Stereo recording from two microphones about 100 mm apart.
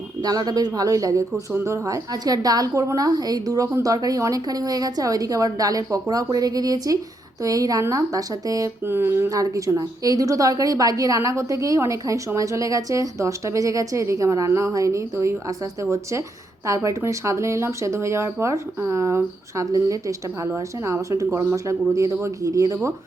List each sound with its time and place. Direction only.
0.2 s a woman's voice: 40° right (ahead or behind)
8.8 s a woman's voice: 25° right (ahead or behind)